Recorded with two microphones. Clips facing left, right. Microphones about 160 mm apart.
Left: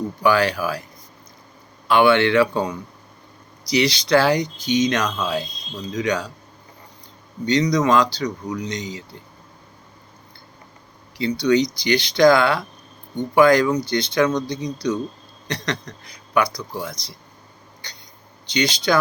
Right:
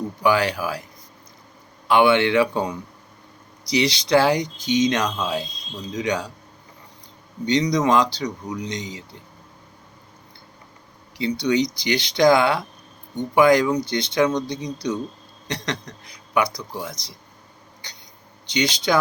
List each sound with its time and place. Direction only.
0.2 s speech: 20° right (ahead or behind)
1.9 s speech: 20° right (ahead or behind)
3.7 s speech: 25° right (ahead or behind)
7.4 s speech: 25° right (ahead or behind)
11.2 s speech: 20° right (ahead or behind)
18.4 s speech: 20° right (ahead or behind)